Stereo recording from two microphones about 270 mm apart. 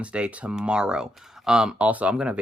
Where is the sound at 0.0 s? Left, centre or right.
Centre.